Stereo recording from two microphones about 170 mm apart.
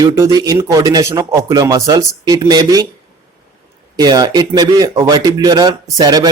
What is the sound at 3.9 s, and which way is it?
Speech, 25° right (ahead or behind).